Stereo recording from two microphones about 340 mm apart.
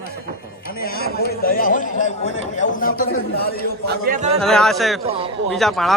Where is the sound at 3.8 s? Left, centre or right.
Right.